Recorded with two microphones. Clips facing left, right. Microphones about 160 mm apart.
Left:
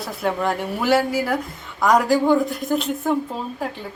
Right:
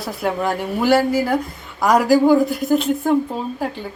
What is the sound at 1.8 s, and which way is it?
A woman's voice, 5° right (ahead or behind).